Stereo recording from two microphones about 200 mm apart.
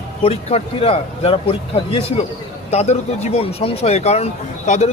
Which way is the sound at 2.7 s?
35° left (ahead or behind).